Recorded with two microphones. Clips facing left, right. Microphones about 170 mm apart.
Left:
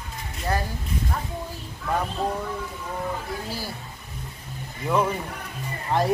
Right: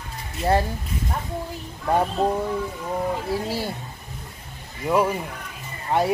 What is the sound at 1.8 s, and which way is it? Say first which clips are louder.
Speech: right 5 dB; 30° right (ahead or behind).